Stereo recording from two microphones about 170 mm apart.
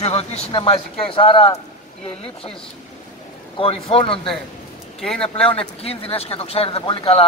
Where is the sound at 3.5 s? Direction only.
30° left (ahead or behind).